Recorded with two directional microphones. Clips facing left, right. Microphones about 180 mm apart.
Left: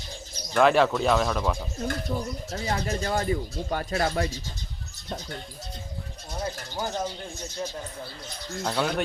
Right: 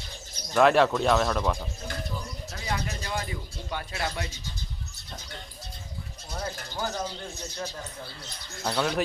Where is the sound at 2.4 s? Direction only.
40° left (ahead or behind).